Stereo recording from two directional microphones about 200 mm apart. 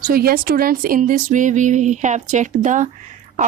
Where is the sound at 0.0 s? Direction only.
50° right (ahead or behind).